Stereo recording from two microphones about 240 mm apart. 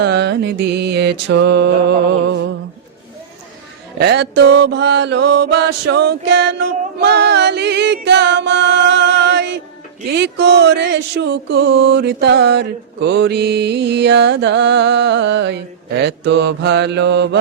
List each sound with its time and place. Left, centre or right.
0.0 s mantra: right
3.9 s mantra: right